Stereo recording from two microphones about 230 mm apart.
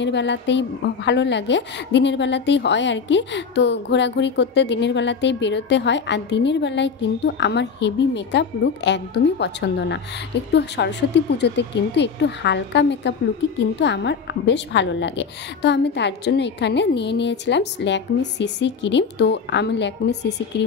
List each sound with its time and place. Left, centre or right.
0.0 s a woman's voice: left